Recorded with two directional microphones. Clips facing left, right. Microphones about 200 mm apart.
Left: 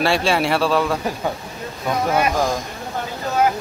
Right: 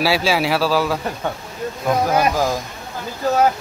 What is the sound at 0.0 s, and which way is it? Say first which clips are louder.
Speech: even; 5° right (ahead or behind).